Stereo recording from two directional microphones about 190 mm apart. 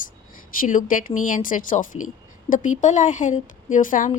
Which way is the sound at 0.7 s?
45° left (ahead or behind).